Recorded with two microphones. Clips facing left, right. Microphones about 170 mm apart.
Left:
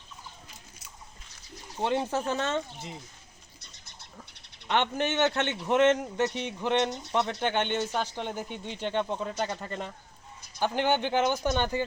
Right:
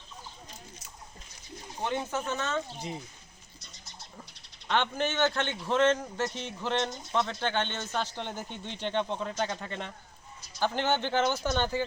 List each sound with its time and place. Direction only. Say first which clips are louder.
1.8 s speech: left 4 dB; 30° left (ahead or behind)
2.7 s speech: right 4 dB; 15° right (ahead or behind)
4.7 s a man's voice: left 2 dB; 20° left (ahead or behind)